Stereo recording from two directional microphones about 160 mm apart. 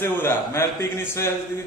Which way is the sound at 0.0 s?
15° left (ahead or behind).